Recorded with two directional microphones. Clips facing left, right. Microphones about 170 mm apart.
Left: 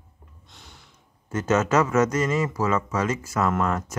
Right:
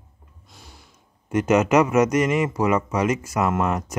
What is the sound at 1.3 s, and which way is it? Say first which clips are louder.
Speech: right 4 dB; 15° right (ahead or behind).